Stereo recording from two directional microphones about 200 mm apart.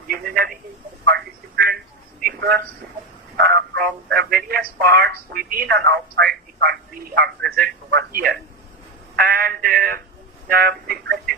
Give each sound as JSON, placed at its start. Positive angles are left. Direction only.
{"t": 0.1, "sound": "speech", "side_deg": -50}
{"t": 1.0, "sound": "telephone", "side_deg": -55}
{"t": 3.3, "sound": "speech", "side_deg": -50}